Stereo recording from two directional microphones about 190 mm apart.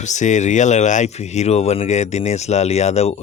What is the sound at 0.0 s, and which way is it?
Speech, 40° left (ahead or behind).